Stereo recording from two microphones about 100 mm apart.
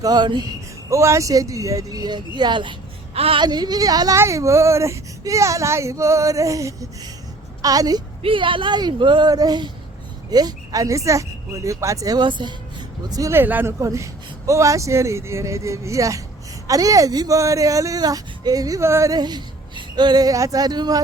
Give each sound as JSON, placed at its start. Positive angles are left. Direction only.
{"t": 0.0, "sound": "speech", "side_deg": -45}
{"t": 0.9, "sound": "speech", "side_deg": -30}
{"t": 3.2, "sound": "speech", "side_deg": -70}
{"t": 3.4, "sound": "speech", "side_deg": -45}
{"t": 8.2, "sound": "speech", "side_deg": -60}
{"t": 12.2, "sound": "speech", "side_deg": -50}
{"t": 13.1, "sound": "speech", "side_deg": -35}
{"t": 13.3, "sound": "speech", "side_deg": -20}
{"t": 13.8, "sound": "speech", "side_deg": -30}
{"t": 19.1, "sound": "speech", "side_deg": -45}